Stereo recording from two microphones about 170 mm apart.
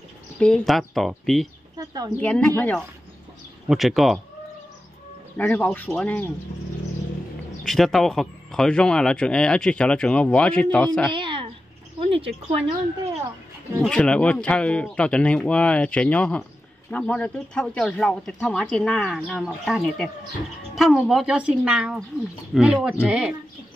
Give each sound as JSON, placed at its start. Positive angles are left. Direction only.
{"t": 0.4, "sound": "speech", "side_deg": 0}
{"t": 1.8, "sound": "a sound", "side_deg": -20}
{"t": 2.1, "sound": "speech", "side_deg": 5}
{"t": 5.4, "sound": "speech", "side_deg": 10}
{"t": 7.6, "sound": "speech", "side_deg": 0}
{"t": 11.1, "sound": "a sound", "side_deg": -30}
{"t": 12.0, "sound": "speech", "side_deg": -35}
{"t": 13.8, "sound": "speech", "side_deg": 5}